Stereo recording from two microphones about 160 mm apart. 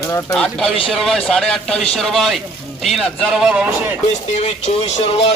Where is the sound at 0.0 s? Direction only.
20° left (ahead or behind).